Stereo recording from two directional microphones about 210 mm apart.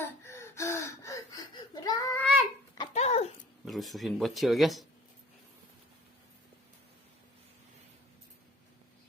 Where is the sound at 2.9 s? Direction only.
30° left (ahead or behind).